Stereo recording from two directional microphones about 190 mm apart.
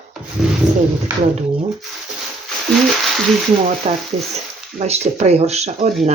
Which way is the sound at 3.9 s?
35° right (ahead or behind).